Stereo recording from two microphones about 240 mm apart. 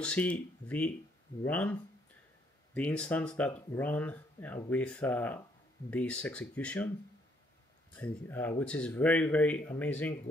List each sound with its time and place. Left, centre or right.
0.0 s speech: centre
7.9 s speech: centre